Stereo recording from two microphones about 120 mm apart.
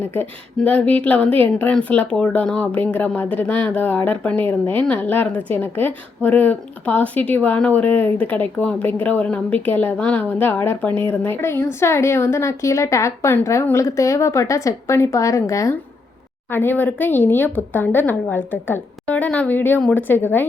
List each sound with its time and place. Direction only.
0.1 s a woman's voice: 15° left (ahead or behind)